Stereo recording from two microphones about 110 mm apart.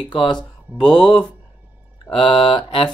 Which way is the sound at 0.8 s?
5° left (ahead or behind).